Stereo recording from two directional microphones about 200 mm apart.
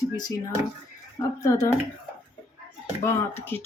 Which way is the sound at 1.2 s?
15° left (ahead or behind).